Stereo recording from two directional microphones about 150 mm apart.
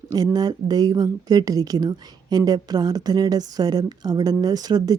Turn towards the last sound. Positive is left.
turn(degrees=-25)  # may be behind; listen again after turning